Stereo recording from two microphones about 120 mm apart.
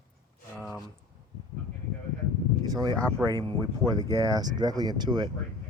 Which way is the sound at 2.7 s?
35° right (ahead or behind).